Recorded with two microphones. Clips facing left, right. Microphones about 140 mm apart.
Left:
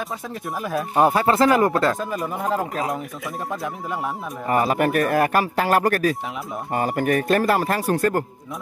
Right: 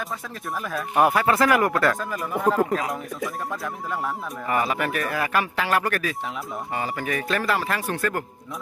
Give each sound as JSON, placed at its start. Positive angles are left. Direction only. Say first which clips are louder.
{"t": 0.7, "sound": "speech", "louder": "left 2 dB", "side_deg": 25}
{"t": 4.5, "sound": "speech", "louder": "left 5 dB", "side_deg": 40}